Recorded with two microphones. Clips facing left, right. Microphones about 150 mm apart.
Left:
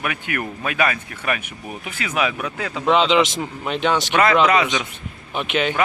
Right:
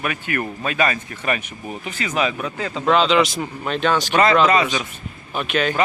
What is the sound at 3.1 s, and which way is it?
Speech, 20° left (ahead or behind).